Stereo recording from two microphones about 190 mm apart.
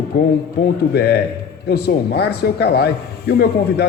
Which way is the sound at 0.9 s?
60° left (ahead or behind).